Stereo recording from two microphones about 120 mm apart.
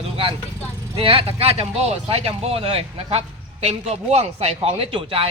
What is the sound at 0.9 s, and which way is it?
Speech, 50° right (ahead or behind).